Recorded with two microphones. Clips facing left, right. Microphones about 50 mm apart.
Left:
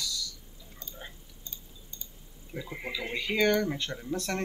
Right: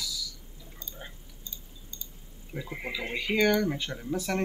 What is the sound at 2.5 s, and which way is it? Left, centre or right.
Speech, centre.